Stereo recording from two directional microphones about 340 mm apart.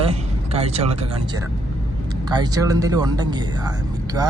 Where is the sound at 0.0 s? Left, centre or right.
Centre.